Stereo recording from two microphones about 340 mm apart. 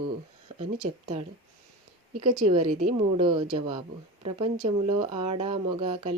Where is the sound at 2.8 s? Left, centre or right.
Centre.